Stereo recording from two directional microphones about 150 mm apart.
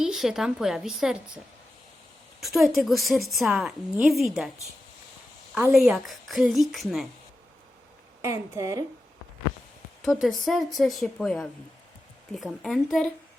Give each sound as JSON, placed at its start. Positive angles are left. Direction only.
{"t": 0.0, "sound": "a woman's voice", "side_deg": -5}
{"t": 2.4, "sound": "a woman's voice", "side_deg": 0}
{"t": 5.7, "sound": "a woman's voice", "side_deg": 0}
{"t": 8.2, "sound": "a woman's voice", "side_deg": -20}
{"t": 10.0, "sound": "a woman's voice", "side_deg": 0}